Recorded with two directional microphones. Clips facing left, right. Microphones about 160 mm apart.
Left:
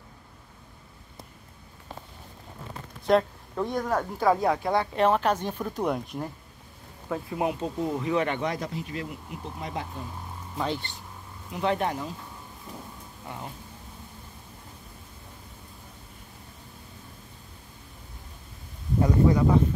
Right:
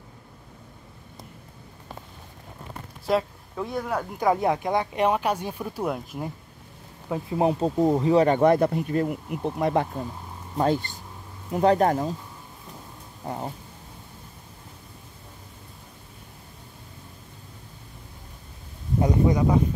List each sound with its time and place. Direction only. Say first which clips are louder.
3.1 s speech: left 2 dB; 5° right (ahead or behind)
4.2 s speech: right 2 dB; 20° right (ahead or behind); by 6.2 s 5° right (ahead or behind)
7.1 s speech: right 5 dB; 25° right (ahead or behind)
8.4 s speech: right 11 dB; 55° right (ahead or behind)
10.6 s speech: right 7 dB; 45° right (ahead or behind)
13.2 s speech: right 7 dB; 35° right (ahead or behind)
18.9 s speech: even; 20° right (ahead or behind)